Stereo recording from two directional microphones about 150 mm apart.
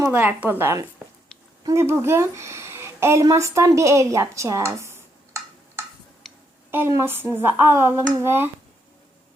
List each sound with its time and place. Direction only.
0.0 s a woman's voice: 15° right (ahead or behind)
6.3 s a sound: 5° left (ahead or behind)
6.7 s a woman's voice: 15° right (ahead or behind)